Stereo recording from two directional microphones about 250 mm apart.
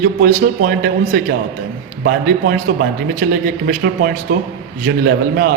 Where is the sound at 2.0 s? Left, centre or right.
Right.